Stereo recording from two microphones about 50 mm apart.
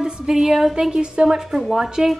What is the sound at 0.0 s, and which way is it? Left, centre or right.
Speech, centre.